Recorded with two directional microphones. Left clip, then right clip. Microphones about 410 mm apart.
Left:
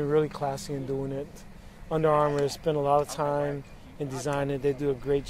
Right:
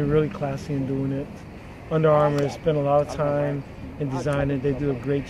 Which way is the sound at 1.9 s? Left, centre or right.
Left.